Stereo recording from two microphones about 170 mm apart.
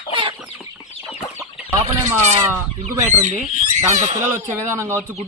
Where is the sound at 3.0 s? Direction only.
15° right (ahead or behind).